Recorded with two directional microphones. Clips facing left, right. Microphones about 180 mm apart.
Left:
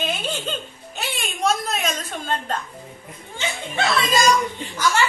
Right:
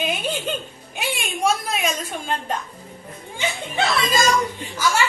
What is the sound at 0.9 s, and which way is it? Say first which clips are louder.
Music: right 3 dB; 10° right (ahead or behind).